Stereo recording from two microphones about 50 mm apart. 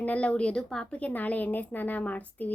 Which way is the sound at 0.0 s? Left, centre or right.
Left.